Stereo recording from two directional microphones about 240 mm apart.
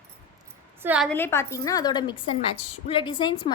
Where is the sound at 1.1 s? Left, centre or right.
Centre.